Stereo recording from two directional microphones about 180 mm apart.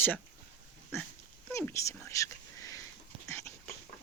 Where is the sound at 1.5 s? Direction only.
15° left (ahead or behind).